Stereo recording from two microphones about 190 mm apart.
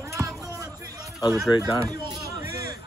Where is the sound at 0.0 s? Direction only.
15° right (ahead or behind).